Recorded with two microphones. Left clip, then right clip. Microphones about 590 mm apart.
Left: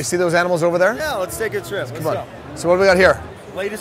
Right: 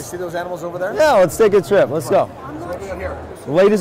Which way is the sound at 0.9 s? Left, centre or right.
Right.